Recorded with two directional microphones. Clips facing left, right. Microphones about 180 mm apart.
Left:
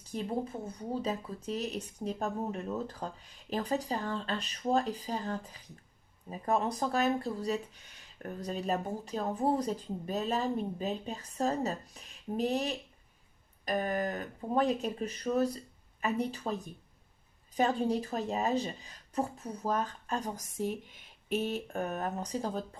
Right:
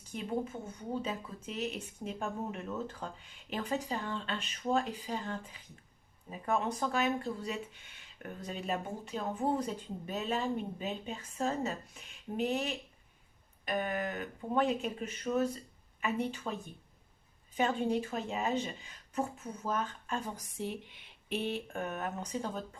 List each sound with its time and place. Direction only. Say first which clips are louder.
0.0 s speech: left 1 dB; 35° left (ahead or behind)